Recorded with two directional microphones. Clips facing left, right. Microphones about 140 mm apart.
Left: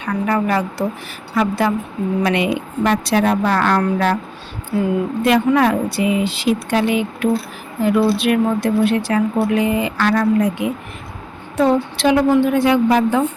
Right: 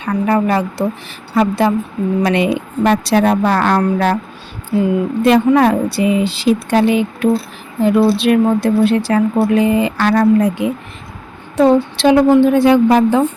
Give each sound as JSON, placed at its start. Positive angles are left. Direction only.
{"t": 0.0, "sound": "a woman's voice", "side_deg": -30}
{"t": 5.2, "sound": "a woman's voice", "side_deg": -30}